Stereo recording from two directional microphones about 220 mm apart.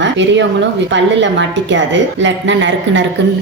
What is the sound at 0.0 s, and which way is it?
A woman's voice, 55° right (ahead or behind).